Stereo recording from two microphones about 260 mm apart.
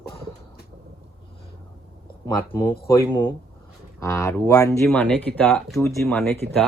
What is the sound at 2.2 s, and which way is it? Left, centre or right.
Speech, centre.